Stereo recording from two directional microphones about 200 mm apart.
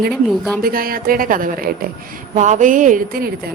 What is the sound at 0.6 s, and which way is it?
A woman's voice, 45° right (ahead or behind).